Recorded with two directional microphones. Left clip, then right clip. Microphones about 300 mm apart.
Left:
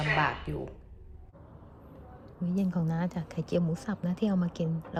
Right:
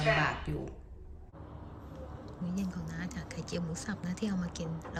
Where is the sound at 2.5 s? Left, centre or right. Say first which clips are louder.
Left 9 dB; centre.